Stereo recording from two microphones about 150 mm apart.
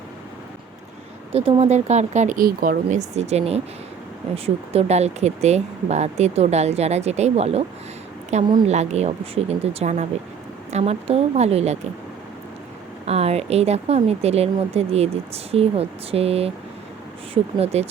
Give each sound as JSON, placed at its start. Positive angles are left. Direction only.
{"t": 1.3, "sound": "speech", "side_deg": -40}
{"t": 8.6, "sound": "speech", "side_deg": -45}
{"t": 13.1, "sound": "speech", "side_deg": -45}